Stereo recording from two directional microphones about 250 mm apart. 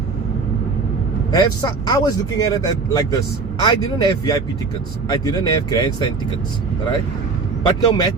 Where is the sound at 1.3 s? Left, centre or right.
Centre.